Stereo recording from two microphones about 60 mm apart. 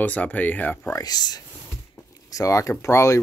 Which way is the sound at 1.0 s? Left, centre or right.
Left.